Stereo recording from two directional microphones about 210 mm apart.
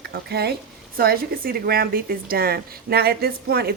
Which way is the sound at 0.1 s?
50° right (ahead or behind).